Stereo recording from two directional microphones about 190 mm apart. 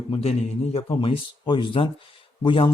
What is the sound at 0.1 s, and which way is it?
A man's voice, 30° left (ahead or behind).